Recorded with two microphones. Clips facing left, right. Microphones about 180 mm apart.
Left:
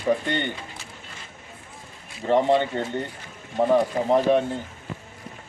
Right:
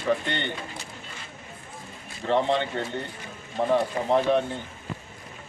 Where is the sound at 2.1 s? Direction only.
5° left (ahead or behind).